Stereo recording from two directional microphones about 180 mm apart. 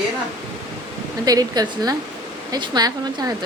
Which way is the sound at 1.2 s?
20° right (ahead or behind).